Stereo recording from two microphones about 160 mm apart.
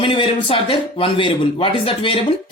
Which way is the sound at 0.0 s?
30° left (ahead or behind).